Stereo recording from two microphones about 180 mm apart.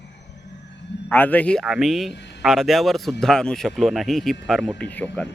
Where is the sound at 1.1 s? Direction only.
10° left (ahead or behind).